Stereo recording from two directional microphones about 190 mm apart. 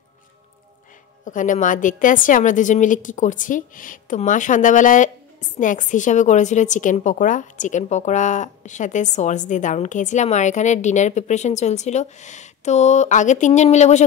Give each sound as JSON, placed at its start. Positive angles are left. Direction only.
{"t": 1.2, "sound": "a woman's voice", "side_deg": 40}